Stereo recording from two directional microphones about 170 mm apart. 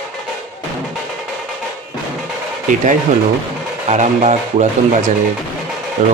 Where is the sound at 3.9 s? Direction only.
45° right (ahead or behind).